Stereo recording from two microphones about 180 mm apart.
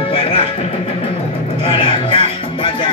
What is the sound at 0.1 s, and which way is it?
Music, 30° left (ahead or behind).